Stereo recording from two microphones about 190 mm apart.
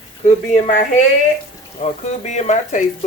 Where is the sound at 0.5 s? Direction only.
35° left (ahead or behind).